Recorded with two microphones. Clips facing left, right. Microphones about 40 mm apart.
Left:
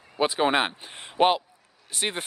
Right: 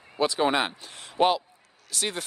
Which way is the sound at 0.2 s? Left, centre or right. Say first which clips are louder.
Left 1 dB; left.